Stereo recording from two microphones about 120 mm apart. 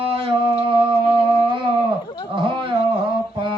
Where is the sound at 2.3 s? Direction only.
45° right (ahead or behind).